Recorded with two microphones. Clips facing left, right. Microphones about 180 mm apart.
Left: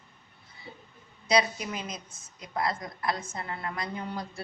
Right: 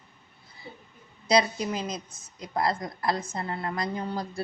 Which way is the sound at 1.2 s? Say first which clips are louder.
Right 3 dB; 35° right (ahead or behind).